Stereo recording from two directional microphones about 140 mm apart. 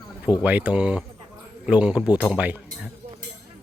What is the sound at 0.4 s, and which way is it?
Speech, 10° right (ahead or behind).